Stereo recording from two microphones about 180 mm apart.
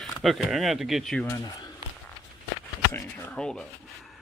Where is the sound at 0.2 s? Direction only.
Centre (ahead or behind).